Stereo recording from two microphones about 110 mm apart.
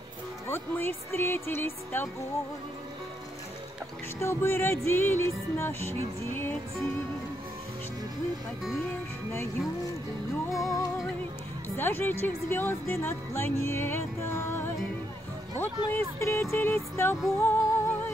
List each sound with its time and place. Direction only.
0.5 s speech: 20° left (ahead or behind)
4.2 s speech: 25° left (ahead or behind)
10.5 s speech: 30° left (ahead or behind)
11.7 s speech: 20° left (ahead or behind)
17.4 s music: 20° left (ahead or behind)